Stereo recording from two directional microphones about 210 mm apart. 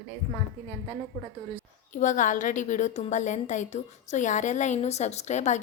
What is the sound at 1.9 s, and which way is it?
A woman's voice, 35° left (ahead or behind).